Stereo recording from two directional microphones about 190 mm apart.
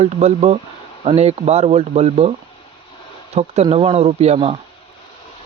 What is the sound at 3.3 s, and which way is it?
Speech, 35° right (ahead or behind).